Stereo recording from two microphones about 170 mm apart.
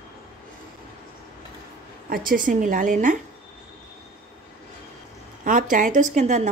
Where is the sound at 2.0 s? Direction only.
55° right (ahead or behind).